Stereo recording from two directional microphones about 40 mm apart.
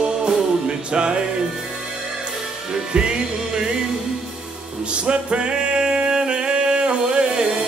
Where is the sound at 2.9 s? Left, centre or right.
Right.